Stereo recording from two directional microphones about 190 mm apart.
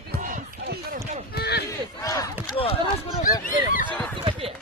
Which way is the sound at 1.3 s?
60° left (ahead or behind).